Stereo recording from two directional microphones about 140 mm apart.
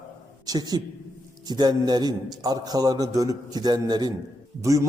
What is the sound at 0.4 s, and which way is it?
A man's voice, 25° right (ahead or behind).